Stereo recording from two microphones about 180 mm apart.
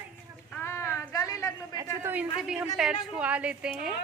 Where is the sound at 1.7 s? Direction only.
15° right (ahead or behind).